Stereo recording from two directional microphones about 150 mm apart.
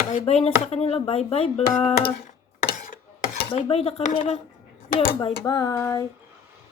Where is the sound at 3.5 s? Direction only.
40° left (ahead or behind).